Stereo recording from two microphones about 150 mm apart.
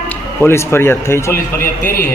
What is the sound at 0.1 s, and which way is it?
A man's voice, 15° left (ahead or behind).